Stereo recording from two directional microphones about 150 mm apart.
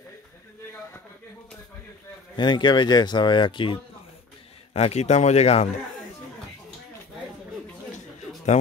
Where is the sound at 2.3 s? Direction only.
30° left (ahead or behind).